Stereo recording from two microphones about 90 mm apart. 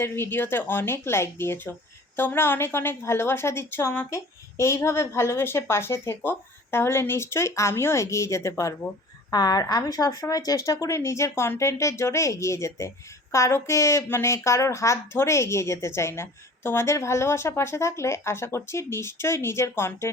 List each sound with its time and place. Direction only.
0.0 s a woman's voice: 25° left (ahead or behind)
9.3 s a woman's voice: 45° left (ahead or behind); by 20.1 s 30° left (ahead or behind)